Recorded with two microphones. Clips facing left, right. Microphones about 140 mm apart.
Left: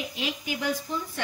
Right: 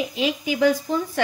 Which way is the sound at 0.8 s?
90° right.